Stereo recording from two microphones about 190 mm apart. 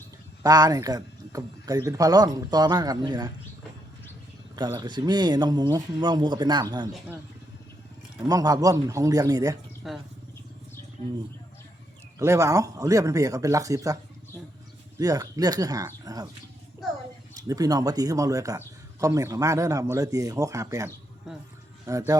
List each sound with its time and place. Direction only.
0.4 s speech: 20° right (ahead or behind)
4.5 s speech: 20° right (ahead or behind)
8.3 s speech: 20° right (ahead or behind)
9.8 s speech: centre (ahead or behind)
12.2 s speech: 15° right (ahead or behind)
16.8 s a sound: centre (ahead or behind)
17.5 s speech: 20° right (ahead or behind)
21.3 s speech: centre (ahead or behind)
21.8 s speech: 15° right (ahead or behind)